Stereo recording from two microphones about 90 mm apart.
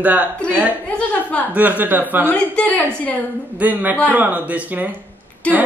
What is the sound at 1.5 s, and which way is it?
Speech, 15° right (ahead or behind).